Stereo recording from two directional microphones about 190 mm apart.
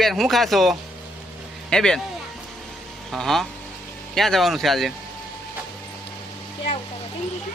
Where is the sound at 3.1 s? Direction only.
Centre (ahead or behind).